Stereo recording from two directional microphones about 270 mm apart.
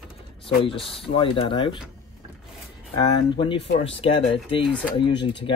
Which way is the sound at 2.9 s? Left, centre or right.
Centre.